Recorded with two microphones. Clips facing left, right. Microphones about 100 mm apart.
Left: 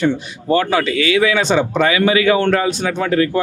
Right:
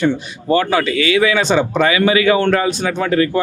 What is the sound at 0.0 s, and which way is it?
A man's voice, 25° right (ahead or behind).